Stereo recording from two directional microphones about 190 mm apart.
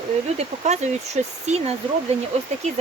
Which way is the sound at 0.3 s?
35° right (ahead or behind).